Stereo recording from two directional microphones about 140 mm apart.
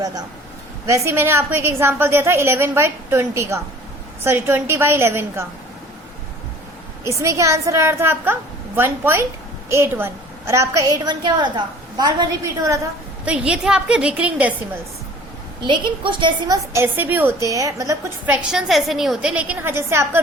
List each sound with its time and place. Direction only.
0.0 s a man's voice: 25° right (ahead or behind)
7.0 s a woman's voice: 20° right (ahead or behind)
13.2 s a woman's voice: 10° right (ahead or behind)
15.6 s a woman's voice: 35° right (ahead or behind)
16.7 s a woman's voice: 15° right (ahead or behind)
18.3 s a woman's voice: centre (ahead or behind); by 20.2 s 20° right (ahead or behind)